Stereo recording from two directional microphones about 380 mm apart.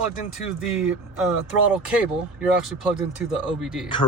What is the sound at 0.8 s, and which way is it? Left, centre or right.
Speech, centre.